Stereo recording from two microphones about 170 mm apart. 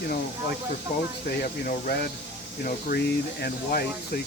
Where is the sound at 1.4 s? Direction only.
65° left (ahead or behind).